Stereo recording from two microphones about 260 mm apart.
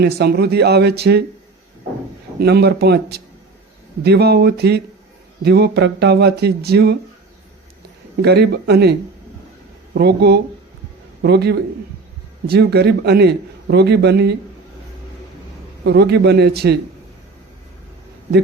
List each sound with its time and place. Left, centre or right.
0.0 s a man's voice: right
2.4 s a man's voice: right
8.2 s a man's voice: right
15.8 s a man's voice: right